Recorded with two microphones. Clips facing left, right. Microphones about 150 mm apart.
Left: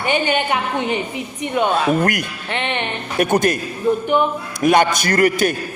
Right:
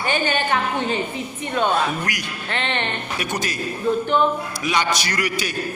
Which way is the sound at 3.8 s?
15° left (ahead or behind).